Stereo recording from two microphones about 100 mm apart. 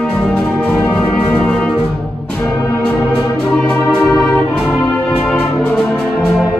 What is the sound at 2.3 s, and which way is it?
Music, 25° left (ahead or behind).